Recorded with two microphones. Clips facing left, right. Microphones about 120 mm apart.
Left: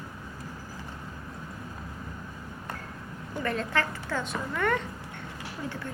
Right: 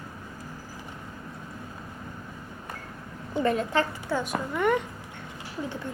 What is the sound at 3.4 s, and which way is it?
A woman's voice, 20° right (ahead or behind).